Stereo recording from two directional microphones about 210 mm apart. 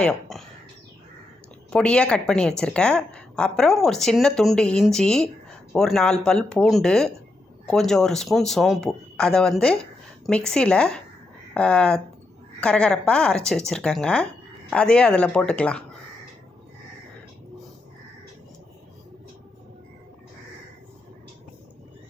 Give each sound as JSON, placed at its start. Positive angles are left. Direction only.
{"t": 0.0, "sound": "speech", "side_deg": 0}
{"t": 1.7, "sound": "a woman's voice", "side_deg": 5}